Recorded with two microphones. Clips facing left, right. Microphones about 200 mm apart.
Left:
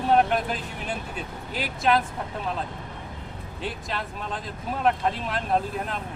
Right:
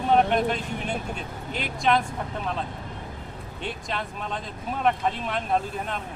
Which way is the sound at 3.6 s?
Centre (ahead or behind).